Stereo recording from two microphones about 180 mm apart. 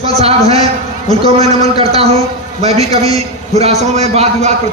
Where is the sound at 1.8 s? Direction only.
35° right (ahead or behind).